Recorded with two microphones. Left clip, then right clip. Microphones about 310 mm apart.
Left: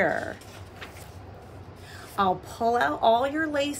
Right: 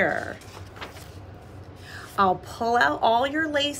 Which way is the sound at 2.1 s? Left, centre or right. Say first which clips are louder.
Right 3 dB; centre.